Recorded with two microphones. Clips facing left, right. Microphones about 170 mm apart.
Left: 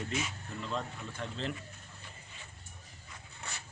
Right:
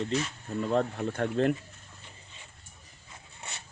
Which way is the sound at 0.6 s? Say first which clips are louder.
Right 11 dB; 55° right (ahead or behind).